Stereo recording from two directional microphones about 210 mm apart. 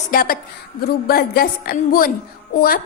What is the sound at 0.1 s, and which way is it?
A woman's voice, 45° left (ahead or behind).